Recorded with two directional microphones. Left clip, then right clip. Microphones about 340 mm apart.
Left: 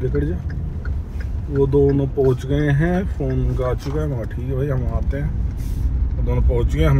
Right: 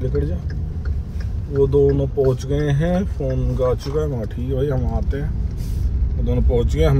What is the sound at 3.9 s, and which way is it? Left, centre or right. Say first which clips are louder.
Speech: right 3 dB; centre.